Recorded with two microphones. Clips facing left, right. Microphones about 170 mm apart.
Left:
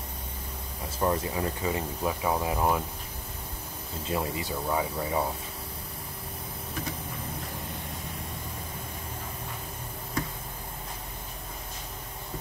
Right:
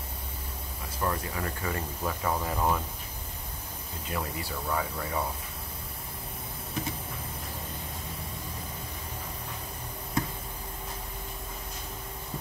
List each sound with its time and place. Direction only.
0.9 s speech: 25° left (ahead or behind)
4.1 s speech: 20° left (ahead or behind)